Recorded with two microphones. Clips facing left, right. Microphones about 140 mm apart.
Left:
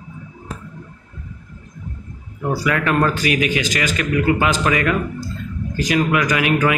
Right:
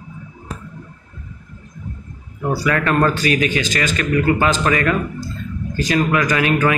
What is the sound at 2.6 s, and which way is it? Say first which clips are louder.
Speech: right 1 dB; 10° left (ahead or behind).